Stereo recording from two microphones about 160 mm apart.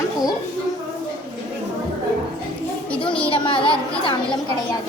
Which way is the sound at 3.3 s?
30° left (ahead or behind).